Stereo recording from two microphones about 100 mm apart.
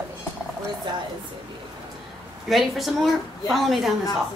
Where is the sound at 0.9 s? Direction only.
50° right (ahead or behind).